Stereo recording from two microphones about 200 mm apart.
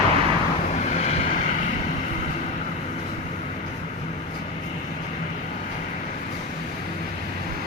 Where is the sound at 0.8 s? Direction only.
35° left (ahead or behind).